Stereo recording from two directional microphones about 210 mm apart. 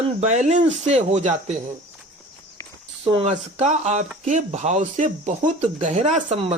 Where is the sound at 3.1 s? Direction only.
30° right (ahead or behind).